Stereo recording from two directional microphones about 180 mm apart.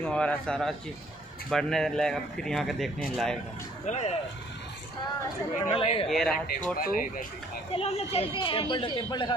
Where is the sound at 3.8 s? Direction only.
40° left (ahead or behind).